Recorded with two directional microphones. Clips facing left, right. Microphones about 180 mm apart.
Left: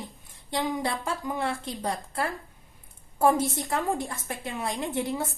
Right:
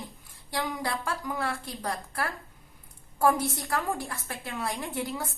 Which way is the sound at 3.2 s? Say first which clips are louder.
Left 2 dB; 25° left (ahead or behind).